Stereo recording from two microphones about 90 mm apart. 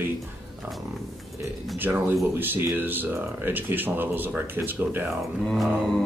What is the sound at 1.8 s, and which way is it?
Speech, 20° right (ahead or behind).